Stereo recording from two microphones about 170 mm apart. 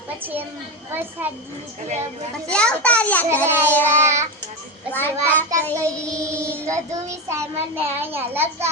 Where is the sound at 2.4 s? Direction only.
5° left (ahead or behind).